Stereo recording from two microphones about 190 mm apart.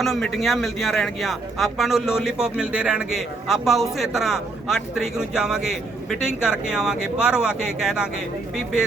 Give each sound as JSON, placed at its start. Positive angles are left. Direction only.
{"t": 0.0, "sound": "speech", "side_deg": 0}